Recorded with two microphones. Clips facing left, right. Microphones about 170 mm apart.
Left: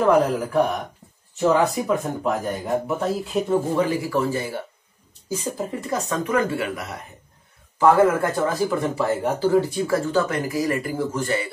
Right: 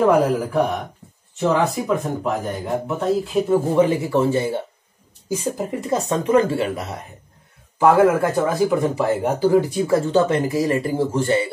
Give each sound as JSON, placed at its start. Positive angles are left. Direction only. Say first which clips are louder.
{"t": 0.0, "sound": "speech", "louder": "right 2 dB", "side_deg": -5}
{"t": 3.7, "sound": "speech", "louder": "right 4 dB", "side_deg": -20}
{"t": 7.8, "sound": "speech", "louder": "right 2 dB", "side_deg": -10}